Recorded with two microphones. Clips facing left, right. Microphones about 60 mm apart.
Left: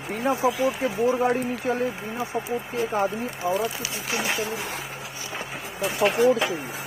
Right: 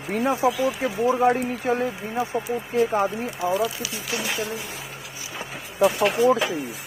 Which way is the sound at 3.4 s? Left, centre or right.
Left.